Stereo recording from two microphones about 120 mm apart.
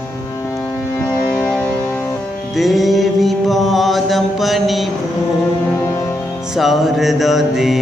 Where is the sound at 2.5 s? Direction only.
Centre (ahead or behind).